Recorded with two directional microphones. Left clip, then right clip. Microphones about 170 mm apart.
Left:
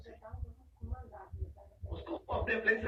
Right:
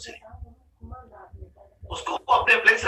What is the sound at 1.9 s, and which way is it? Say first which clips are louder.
Chicken: right 17 dB; 75° right (ahead or behind).